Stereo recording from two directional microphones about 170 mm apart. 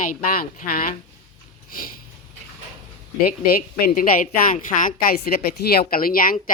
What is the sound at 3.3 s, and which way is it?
A woman's voice, 60° left (ahead or behind).